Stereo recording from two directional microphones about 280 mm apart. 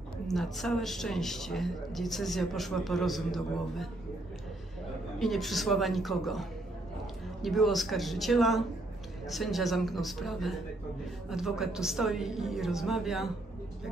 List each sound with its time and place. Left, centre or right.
0.3 s a man's voice: centre
5.2 s a man's voice: centre
7.4 s a man's voice: centre